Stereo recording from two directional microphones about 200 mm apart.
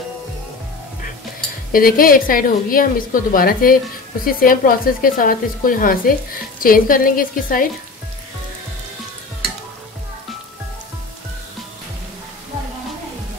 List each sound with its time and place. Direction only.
1.7 s a woman's voice: 45° left (ahead or behind)